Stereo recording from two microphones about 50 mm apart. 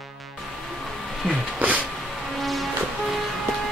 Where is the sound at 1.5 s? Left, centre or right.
Right.